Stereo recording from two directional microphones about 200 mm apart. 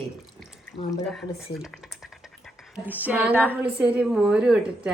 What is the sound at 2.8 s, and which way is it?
A woman's voice, 10° right (ahead or behind).